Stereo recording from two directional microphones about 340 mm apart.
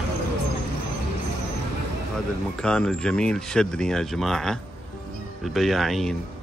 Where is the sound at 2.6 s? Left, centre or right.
Centre.